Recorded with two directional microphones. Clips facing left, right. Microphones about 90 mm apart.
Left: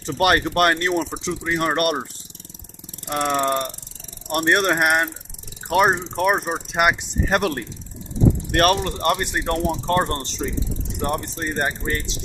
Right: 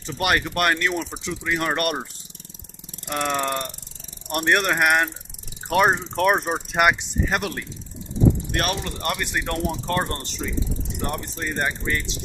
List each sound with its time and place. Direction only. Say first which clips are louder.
0.0 s speech: left 4 dB; 40° left (ahead or behind)
3.1 s speech: left 3 dB; 20° left (ahead or behind)
5.9 s speech: even; 15° left (ahead or behind)
6.3 s speech: even; centre (ahead or behind)
7.3 s speech: left 6 dB; 45° left (ahead or behind)
8.4 s speech: left 8 dB; 60° left (ahead or behind)
9.0 s speech: left 5 dB; 35° left (ahead or behind)